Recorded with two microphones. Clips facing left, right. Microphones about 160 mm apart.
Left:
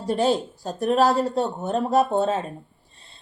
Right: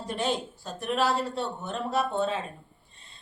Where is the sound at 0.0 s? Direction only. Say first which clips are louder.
Left 8 dB; 35° left (ahead or behind).